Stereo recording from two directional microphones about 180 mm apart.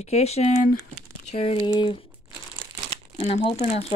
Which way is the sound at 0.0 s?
35° left (ahead or behind).